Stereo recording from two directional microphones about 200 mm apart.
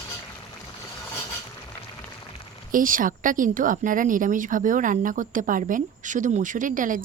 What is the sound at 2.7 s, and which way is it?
Speech, 40° right (ahead or behind).